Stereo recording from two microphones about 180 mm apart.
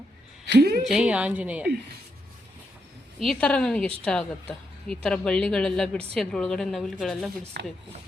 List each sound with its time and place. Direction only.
0.4 s a woman's voice: 65° right (ahead or behind)
0.9 s a woman's voice: 5° right (ahead or behind)
3.2 s a woman's voice: 5° left (ahead or behind)
7.6 s a woman's voice: 70° right (ahead or behind)